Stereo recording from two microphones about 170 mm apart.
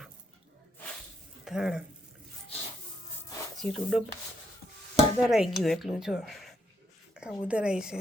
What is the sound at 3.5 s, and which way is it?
Speech, centre (ahead or behind).